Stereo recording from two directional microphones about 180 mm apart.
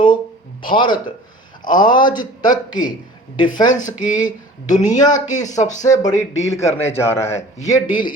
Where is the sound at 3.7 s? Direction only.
45° left (ahead or behind).